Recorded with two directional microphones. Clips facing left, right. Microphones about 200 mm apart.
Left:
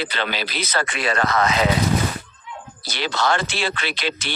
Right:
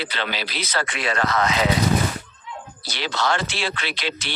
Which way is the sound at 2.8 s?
50° left (ahead or behind).